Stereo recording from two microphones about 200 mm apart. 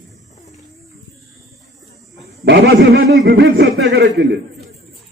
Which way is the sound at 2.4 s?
50° right (ahead or behind).